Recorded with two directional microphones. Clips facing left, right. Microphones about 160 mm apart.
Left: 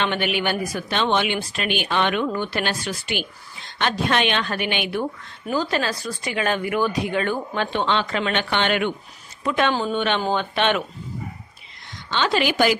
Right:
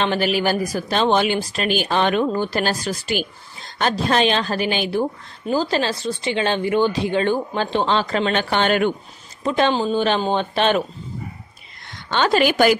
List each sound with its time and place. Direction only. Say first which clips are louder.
0.0 s a woman's voice: right 4 dB; 35° right (ahead or behind)
12.1 s a woman's voice: right 4 dB; 45° right (ahead or behind)